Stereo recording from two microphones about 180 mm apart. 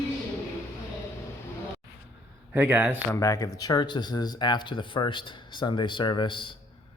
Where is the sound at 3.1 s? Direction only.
20° left (ahead or behind).